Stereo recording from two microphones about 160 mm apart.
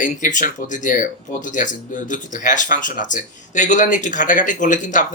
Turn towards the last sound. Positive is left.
turn(degrees=50)  # may be behind; listen again after turning